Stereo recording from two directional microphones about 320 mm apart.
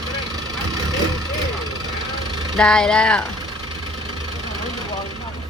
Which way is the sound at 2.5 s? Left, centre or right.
Centre.